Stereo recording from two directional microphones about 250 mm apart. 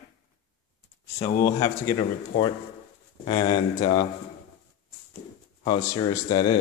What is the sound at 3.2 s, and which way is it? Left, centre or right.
Speech, centre.